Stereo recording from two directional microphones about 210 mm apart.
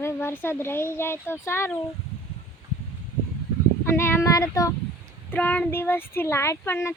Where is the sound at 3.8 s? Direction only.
10° left (ahead or behind).